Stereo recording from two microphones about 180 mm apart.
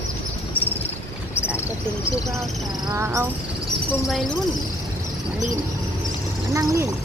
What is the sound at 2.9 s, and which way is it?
Speech, 15° right (ahead or behind).